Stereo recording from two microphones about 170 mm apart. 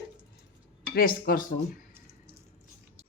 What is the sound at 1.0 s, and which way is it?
Speech, 60° left (ahead or behind).